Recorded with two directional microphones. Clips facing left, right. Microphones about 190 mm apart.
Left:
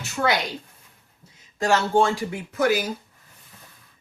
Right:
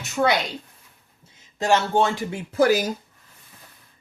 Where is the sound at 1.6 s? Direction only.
20° right (ahead or behind).